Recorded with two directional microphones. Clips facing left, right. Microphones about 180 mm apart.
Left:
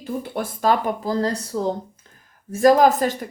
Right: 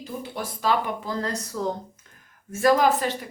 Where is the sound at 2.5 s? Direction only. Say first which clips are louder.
Left 5 dB; 40° left (ahead or behind).